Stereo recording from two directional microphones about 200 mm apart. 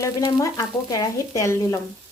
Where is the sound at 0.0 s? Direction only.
15° left (ahead or behind).